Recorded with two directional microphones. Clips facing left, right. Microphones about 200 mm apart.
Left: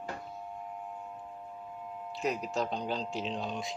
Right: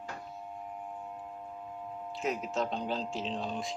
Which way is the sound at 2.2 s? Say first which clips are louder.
Even; centre (ahead or behind).